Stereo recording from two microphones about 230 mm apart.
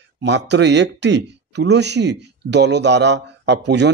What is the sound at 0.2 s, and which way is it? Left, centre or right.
Speech, right.